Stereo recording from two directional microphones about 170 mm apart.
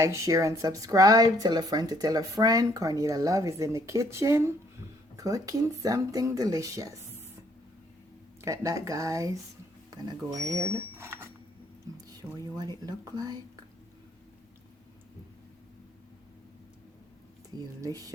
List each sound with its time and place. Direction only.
0.0 s speech: 15° right (ahead or behind)
8.4 s speech: 20° right (ahead or behind)
12.4 s speech: 20° right (ahead or behind)
17.7 s speech: 20° right (ahead or behind)